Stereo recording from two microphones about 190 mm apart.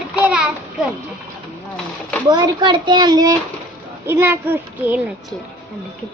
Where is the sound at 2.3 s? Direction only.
20° right (ahead or behind).